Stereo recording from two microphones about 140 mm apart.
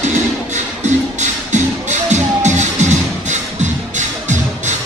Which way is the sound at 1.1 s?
60° right (ahead or behind).